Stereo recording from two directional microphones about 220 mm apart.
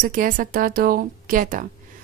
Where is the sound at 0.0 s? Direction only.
40° right (ahead or behind).